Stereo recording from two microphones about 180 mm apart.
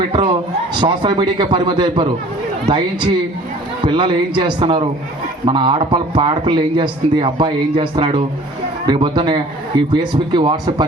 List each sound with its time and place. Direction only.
0.8 s a man's voice: 25° right (ahead or behind)